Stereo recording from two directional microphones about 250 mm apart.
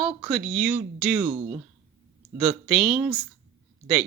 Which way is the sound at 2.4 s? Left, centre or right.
Centre.